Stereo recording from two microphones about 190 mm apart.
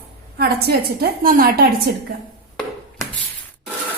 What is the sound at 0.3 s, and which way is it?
A woman's voice, 50° right (ahead or behind).